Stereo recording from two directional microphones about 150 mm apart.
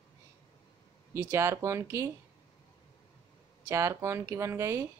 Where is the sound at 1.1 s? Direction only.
20° right (ahead or behind).